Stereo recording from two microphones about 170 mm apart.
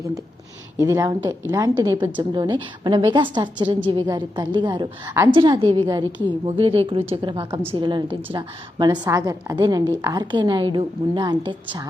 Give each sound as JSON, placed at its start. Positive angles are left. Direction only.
{"t": 0.8, "sound": "a woman's voice", "side_deg": -20}